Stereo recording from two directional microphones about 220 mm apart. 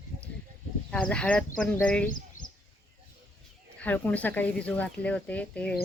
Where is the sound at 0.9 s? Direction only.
5° left (ahead or behind).